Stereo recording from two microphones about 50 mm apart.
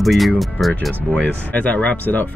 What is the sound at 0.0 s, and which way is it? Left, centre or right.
Speech, centre.